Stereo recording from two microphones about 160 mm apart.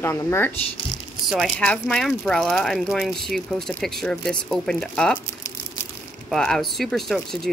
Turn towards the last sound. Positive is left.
turn(degrees=0)  # may be behind; listen again after turning